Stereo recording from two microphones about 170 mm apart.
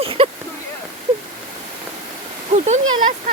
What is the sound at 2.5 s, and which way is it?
Speech, 35° right (ahead or behind).